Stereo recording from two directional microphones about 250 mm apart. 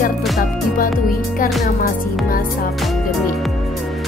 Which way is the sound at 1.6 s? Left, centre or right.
Left.